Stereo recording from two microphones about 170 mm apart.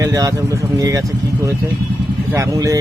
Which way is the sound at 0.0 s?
20° right (ahead or behind).